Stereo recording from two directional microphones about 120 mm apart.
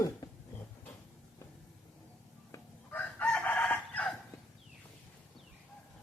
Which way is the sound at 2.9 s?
10° left (ahead or behind).